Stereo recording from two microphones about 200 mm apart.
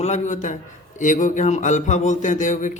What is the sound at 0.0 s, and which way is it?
A man's voice, 35° left (ahead or behind).